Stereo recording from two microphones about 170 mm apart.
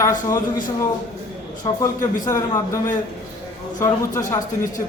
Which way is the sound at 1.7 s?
30° left (ahead or behind).